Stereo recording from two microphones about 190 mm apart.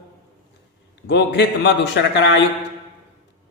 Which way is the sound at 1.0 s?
65° left (ahead or behind).